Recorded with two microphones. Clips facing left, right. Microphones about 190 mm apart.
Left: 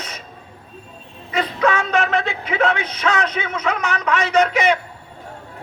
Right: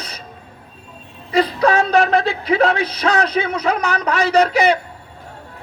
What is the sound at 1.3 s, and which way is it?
A man's voice, 35° right (ahead or behind).